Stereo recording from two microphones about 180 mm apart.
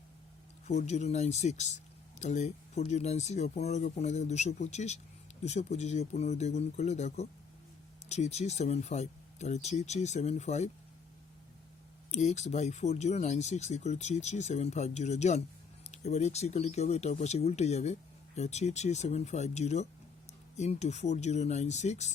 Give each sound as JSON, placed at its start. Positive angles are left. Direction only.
{"t": 0.7, "sound": "speech", "side_deg": 40}
{"t": 12.1, "sound": "speech", "side_deg": 40}